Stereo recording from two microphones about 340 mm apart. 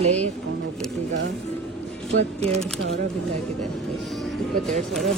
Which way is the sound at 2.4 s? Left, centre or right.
Centre.